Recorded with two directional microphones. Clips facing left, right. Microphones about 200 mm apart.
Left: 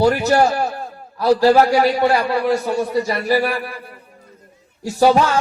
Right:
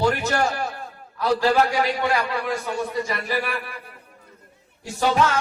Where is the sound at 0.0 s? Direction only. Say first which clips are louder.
Left 7 dB; 35° left (ahead or behind).